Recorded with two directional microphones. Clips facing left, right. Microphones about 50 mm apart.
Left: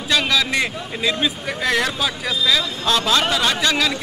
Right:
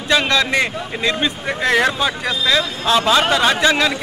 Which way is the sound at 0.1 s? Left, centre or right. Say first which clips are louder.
Right 3 dB; centre.